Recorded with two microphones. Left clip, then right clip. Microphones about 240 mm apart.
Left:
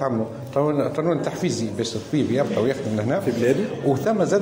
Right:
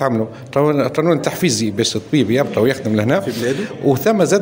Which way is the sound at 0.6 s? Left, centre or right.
Right.